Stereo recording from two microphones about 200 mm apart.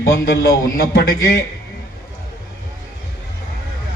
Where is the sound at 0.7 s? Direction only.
50° left (ahead or behind).